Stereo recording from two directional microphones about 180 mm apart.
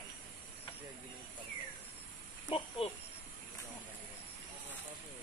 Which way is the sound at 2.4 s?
30° left (ahead or behind).